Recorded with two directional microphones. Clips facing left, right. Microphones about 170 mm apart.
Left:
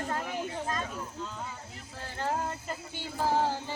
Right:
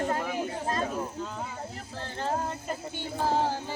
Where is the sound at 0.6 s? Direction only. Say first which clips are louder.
Right 5 dB; 40° right (ahead or behind).